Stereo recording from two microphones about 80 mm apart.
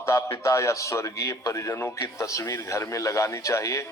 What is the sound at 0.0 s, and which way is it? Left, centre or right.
Speech, left.